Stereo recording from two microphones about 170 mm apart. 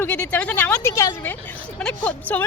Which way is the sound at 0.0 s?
10° left (ahead or behind).